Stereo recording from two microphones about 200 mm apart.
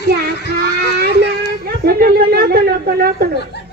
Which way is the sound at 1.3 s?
50° right (ahead or behind).